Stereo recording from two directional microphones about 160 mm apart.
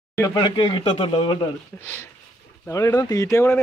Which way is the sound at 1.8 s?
10° left (ahead or behind).